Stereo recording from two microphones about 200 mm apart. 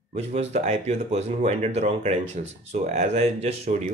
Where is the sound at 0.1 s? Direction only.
30° right (ahead or behind).